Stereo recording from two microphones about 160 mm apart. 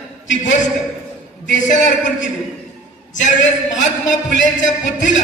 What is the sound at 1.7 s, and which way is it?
A man's voice, 50° left (ahead or behind).